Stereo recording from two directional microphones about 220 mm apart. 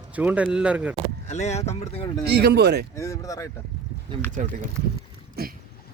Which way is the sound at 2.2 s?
50° right (ahead or behind).